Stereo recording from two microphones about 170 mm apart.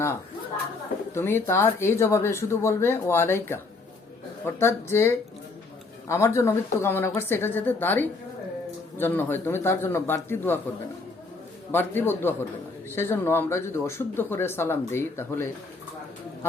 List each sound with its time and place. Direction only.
1.1 s speech: 15° left (ahead or behind)
4.6 s speech: 15° left (ahead or behind)
11.7 s speech: 10° left (ahead or behind)